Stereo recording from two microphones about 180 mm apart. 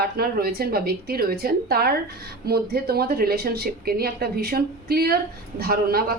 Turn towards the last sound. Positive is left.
turn(degrees=-55)  # may be behind; listen again after turning